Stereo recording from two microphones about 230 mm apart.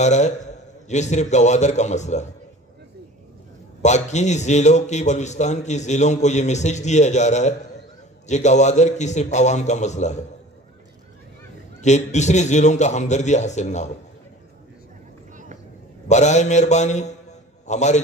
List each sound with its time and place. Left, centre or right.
0.0 s a man's voice: left
3.8 s a man's voice: left
11.8 s a man's voice: left
16.1 s a man's voice: left